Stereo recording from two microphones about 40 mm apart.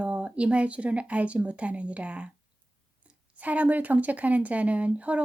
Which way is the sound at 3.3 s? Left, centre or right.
Right.